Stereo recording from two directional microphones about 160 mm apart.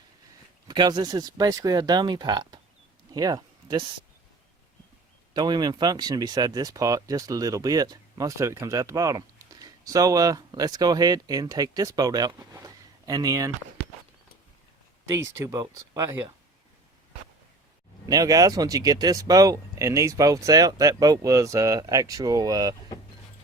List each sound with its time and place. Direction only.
0.7 s speech: 25° right (ahead or behind)
3.1 s a sound: 25° right (ahead or behind)
5.3 s speech: 25° right (ahead or behind)
15.0 s speech: 20° right (ahead or behind)
18.1 s speech: 20° right (ahead or behind)